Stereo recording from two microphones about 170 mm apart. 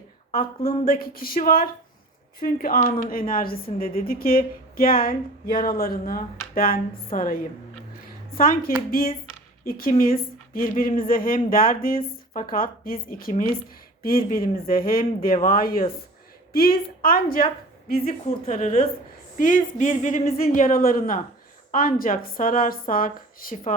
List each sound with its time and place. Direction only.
0.3 s speech: 60° left (ahead or behind)
8.4 s a woman's voice: 55° left (ahead or behind)
18.3 s a woman's voice: 35° left (ahead or behind); by 23.7 s 55° left (ahead or behind)